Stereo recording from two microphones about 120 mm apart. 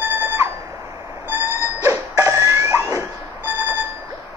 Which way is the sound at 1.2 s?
20° right (ahead or behind).